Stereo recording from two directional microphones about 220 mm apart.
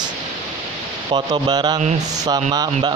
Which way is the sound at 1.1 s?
20° right (ahead or behind).